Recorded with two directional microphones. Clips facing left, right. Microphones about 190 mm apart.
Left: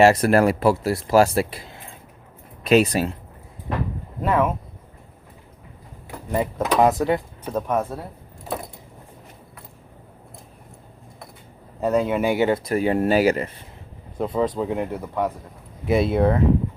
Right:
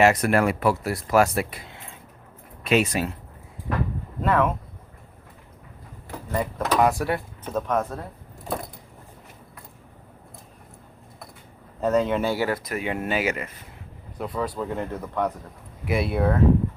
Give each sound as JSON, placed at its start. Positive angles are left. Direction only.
{"t": 0.0, "sound": "speech", "side_deg": 30}
{"t": 4.2, "sound": "speech", "side_deg": 10}
{"t": 6.3, "sound": "speech", "side_deg": 15}
{"t": 8.4, "sound": "a sound", "side_deg": 0}
{"t": 11.8, "sound": "speech", "side_deg": 10}
{"t": 14.2, "sound": "speech", "side_deg": 20}
{"t": 15.9, "sound": "speech", "side_deg": 25}